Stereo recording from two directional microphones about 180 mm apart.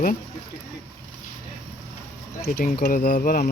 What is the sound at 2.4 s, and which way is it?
Speech, 55° left (ahead or behind).